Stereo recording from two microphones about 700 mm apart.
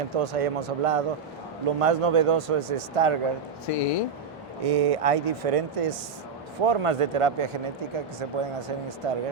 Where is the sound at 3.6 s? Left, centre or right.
Left.